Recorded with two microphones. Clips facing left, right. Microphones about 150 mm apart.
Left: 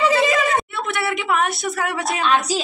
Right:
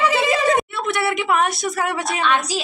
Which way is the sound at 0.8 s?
Centre (ahead or behind).